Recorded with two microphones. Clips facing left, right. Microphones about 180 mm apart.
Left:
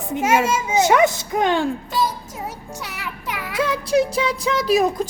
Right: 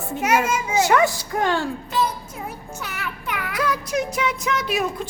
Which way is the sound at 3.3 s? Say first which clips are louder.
Left 2 dB; 25° left (ahead or behind).